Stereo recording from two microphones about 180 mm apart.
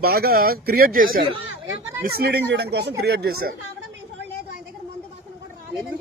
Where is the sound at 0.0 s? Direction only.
60° right (ahead or behind).